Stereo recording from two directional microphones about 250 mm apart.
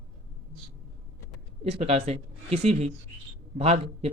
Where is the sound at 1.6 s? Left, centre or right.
Right.